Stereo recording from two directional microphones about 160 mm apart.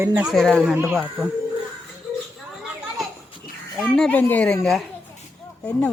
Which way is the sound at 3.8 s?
5° left (ahead or behind).